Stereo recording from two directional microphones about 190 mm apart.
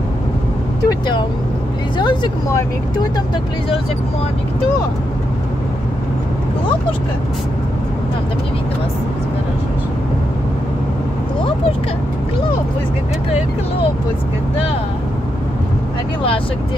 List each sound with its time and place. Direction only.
0.8 s speech: 25° left (ahead or behind)